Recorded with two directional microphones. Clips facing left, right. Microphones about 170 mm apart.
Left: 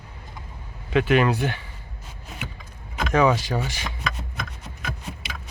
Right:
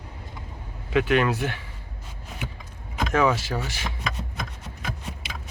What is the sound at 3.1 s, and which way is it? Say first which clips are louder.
Speech: left 3 dB; centre (ahead or behind).